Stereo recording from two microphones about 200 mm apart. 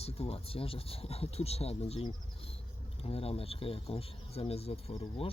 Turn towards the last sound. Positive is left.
turn(degrees=30)  # may be behind; listen again after turning